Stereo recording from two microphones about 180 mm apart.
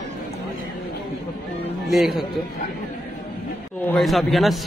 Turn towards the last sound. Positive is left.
turn(degrees=0)  # may be behind; listen again after turning